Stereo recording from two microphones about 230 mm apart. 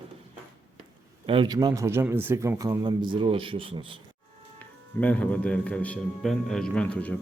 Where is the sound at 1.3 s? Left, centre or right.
Centre.